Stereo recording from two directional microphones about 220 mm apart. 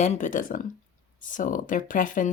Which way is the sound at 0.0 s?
35° left (ahead or behind).